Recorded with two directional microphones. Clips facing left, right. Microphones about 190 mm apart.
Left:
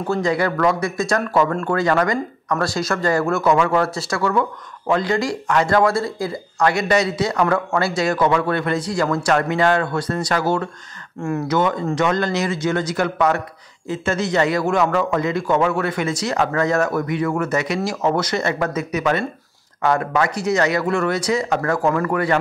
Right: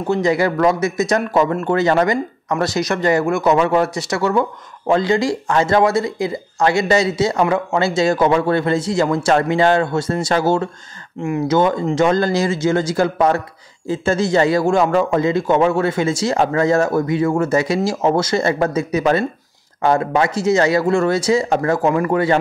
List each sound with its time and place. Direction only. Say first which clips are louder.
0.0 s speech: right 3 dB; 20° right (ahead or behind)
11.2 s speech: right 3 dB; 15° right (ahead or behind)
11.5 s speech: right 4 dB; 30° right (ahead or behind)